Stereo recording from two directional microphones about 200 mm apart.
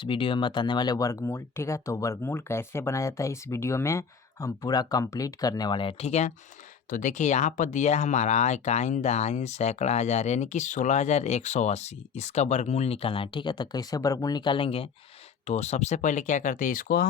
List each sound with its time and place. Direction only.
0.0 s speech: 25° left (ahead or behind); by 17.1 s 45° left (ahead or behind)